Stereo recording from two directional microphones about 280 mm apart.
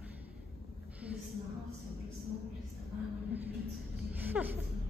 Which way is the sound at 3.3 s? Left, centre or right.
Centre.